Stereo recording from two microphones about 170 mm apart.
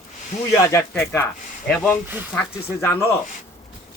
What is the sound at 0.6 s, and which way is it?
A man's voice, 15° left (ahead or behind).